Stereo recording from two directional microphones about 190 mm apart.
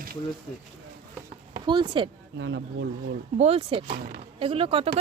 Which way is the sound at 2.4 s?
70° right (ahead or behind).